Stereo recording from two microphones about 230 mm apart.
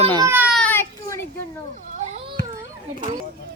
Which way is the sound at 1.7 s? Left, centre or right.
Right.